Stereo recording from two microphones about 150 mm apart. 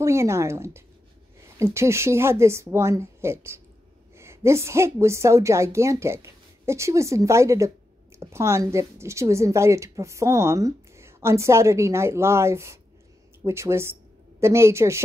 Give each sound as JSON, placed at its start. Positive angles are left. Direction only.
{"t": 0.0, "sound": "a woman's voice", "side_deg": -20}